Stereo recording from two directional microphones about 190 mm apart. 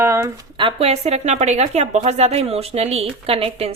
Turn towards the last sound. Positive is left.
turn(degrees=-30)  # may be behind; listen again after turning